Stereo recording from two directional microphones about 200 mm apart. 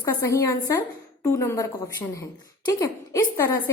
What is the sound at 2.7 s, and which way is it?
Speech, 15° left (ahead or behind).